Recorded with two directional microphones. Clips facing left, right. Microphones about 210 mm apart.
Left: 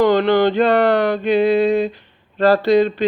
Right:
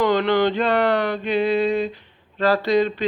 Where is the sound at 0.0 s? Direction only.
35° left (ahead or behind).